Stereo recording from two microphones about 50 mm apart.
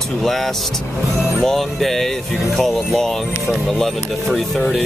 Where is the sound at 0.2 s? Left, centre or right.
Centre.